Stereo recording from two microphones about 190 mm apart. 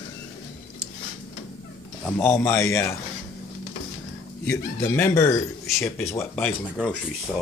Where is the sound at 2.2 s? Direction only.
10° left (ahead or behind).